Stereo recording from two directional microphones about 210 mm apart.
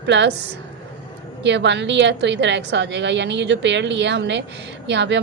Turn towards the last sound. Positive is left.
turn(degrees=-55)  # may be behind; listen again after turning